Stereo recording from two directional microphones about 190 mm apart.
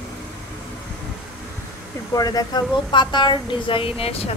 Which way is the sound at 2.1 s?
20° left (ahead or behind).